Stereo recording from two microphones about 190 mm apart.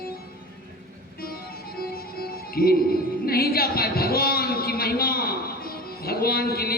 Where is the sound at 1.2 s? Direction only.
50° left (ahead or behind).